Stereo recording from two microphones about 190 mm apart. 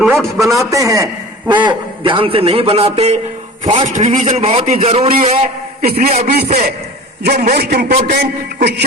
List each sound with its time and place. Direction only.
0.3 s a man's voice: 15° right (ahead or behind); by 5.5 s 35° right (ahead or behind)
5.8 s a man's voice: 50° right (ahead or behind)
7.9 s a man's voice: 45° right (ahead or behind)